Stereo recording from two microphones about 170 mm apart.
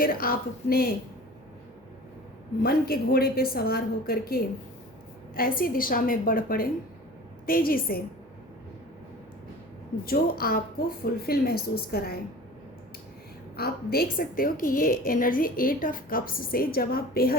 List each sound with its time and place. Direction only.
0.0 s a woman's voice: 60° left (ahead or behind)
2.6 s a woman's voice: 65° left (ahead or behind)
10.0 s a woman's voice: 60° left (ahead or behind)
13.6 s a woman's voice: 65° left (ahead or behind)